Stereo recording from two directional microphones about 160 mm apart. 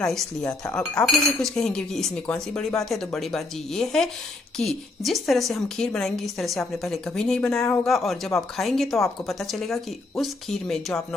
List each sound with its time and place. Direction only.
0.0 s a woman's voice: centre (ahead or behind)